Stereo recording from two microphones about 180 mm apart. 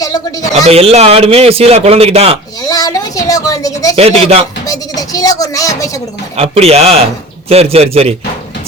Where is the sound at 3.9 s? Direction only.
35° right (ahead or behind).